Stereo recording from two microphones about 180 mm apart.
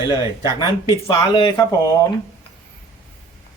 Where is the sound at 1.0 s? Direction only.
25° left (ahead or behind).